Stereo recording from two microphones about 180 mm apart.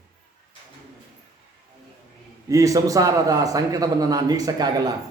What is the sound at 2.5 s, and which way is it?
A man's voice, 20° right (ahead or behind).